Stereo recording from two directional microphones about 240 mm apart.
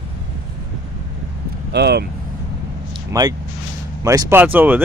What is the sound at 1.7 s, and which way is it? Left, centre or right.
Speech, right.